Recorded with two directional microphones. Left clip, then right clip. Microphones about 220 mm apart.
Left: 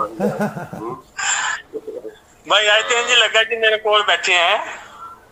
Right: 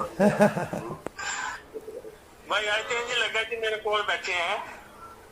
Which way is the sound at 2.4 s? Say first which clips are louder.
Left 12 dB; 50° left (ahead or behind).